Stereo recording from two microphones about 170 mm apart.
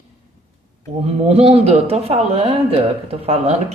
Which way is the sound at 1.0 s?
35° right (ahead or behind).